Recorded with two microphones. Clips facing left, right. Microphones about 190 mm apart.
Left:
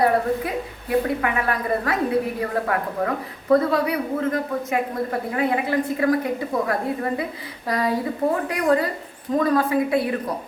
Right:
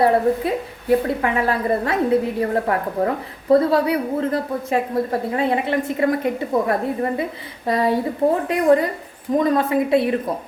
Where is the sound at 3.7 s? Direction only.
30° right (ahead or behind).